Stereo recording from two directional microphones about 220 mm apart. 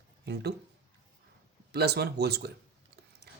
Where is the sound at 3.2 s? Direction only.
45° right (ahead or behind).